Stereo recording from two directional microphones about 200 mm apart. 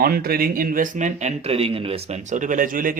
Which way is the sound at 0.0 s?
50° right (ahead or behind).